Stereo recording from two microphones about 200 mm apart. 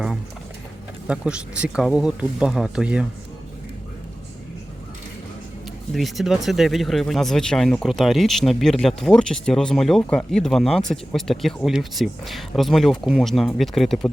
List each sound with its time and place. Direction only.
1.0 s speech: 5° right (ahead or behind)
5.9 s speech: centre (ahead or behind)